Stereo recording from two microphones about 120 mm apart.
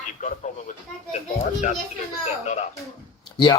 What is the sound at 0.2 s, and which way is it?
Speech, 90° left.